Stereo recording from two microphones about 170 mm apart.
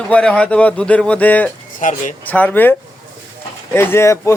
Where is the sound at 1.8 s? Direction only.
50° left (ahead or behind).